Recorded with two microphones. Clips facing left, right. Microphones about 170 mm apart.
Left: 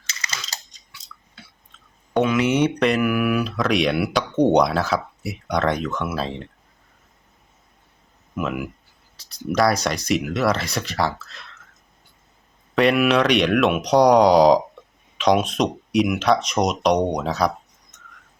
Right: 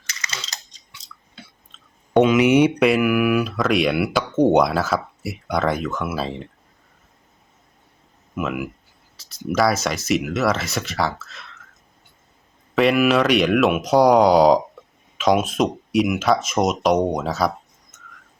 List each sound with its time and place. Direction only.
0.1 s a sound: 30° left (ahead or behind)
2.2 s speech: 15° right (ahead or behind)
8.4 s speech: centre (ahead or behind)
12.7 s speech: centre (ahead or behind)